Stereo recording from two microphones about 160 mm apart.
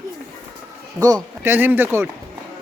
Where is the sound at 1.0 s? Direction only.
20° right (ahead or behind).